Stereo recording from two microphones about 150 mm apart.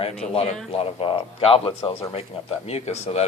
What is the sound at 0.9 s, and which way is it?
Speech, 35° left (ahead or behind).